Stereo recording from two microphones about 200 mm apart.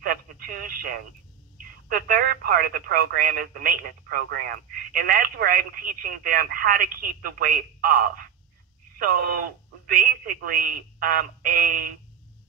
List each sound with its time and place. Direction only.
0.0 s telephone: 45° right (ahead or behind)
1.6 s speech: 45° right (ahead or behind)